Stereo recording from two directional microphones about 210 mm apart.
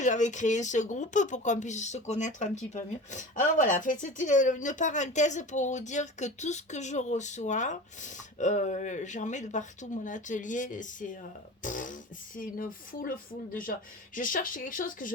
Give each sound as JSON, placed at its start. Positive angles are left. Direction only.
{"t": 0.0, "sound": "speech", "side_deg": 35}